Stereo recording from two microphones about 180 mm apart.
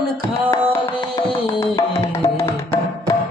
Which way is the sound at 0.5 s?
15° left (ahead or behind).